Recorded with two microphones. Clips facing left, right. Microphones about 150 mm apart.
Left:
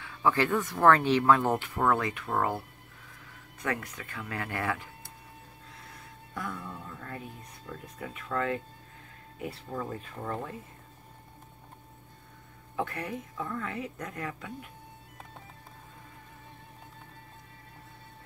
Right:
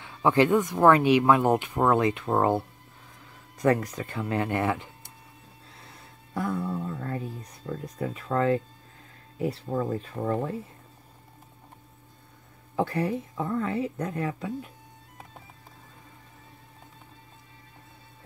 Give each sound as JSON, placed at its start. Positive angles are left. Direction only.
{"t": 0.0, "sound": "speech", "side_deg": -25}
{"t": 3.5, "sound": "a woman's voice", "side_deg": -35}
{"t": 6.3, "sound": "a woman's voice", "side_deg": -35}
{"t": 12.7, "sound": "a woman's voice", "side_deg": -30}